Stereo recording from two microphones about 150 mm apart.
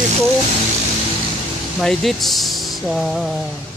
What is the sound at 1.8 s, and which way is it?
Speech, centre (ahead or behind).